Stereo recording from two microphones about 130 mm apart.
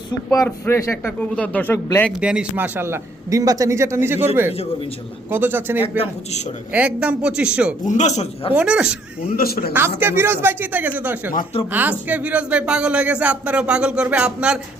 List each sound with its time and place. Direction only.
0.3 s speech: 20° left (ahead or behind)
2.2 s a man's voice: 10° right (ahead or behind)
5.3 s speech: 15° right (ahead or behind)
7.9 s speech: 65° left (ahead or behind)
8.5 s speech: 10° right (ahead or behind)
9.7 s speech: 15° right (ahead or behind)